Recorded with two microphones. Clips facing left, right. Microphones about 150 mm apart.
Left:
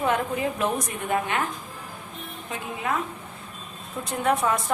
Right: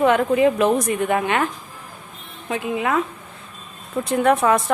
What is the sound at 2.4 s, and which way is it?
Speech, 90° right.